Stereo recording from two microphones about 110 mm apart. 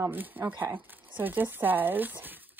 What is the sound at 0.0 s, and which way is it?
Speech, 15° right (ahead or behind).